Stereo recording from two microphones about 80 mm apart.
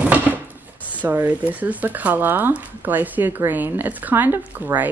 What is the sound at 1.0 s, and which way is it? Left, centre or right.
Speech, right.